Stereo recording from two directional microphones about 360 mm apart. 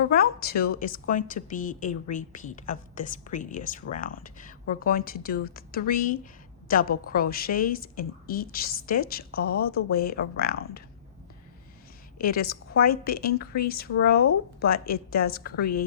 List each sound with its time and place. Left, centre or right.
0.1 s a woman's voice: left
12.2 s a woman's voice: left